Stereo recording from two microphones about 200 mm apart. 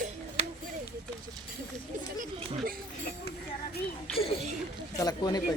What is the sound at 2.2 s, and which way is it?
Chatter, 40° right (ahead or behind).